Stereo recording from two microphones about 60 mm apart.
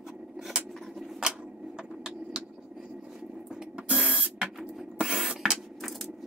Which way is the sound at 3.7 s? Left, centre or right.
Centre.